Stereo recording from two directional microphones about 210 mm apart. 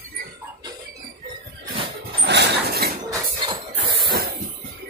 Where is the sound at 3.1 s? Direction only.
25° right (ahead or behind).